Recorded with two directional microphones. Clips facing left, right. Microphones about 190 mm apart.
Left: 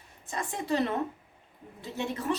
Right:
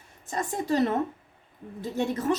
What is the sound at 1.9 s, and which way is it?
Speech, 45° right (ahead or behind).